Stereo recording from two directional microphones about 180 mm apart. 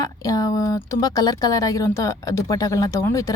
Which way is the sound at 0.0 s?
20° left (ahead or behind).